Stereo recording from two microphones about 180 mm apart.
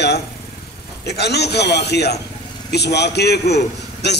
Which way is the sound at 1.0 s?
65° left (ahead or behind).